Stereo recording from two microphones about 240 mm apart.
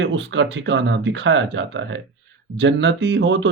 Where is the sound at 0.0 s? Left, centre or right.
Right.